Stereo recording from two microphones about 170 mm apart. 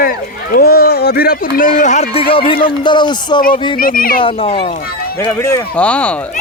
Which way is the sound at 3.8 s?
55° left (ahead or behind).